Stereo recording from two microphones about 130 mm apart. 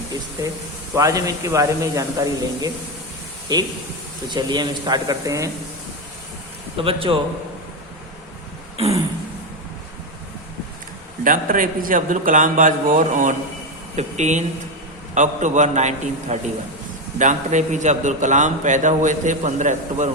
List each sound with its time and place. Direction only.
0.9 s a man's voice: 25° right (ahead or behind)
6.7 s a man's voice: 45° right (ahead or behind)
11.2 s a man's voice: 90° right
13.9 s a man's voice: 65° right (ahead or behind)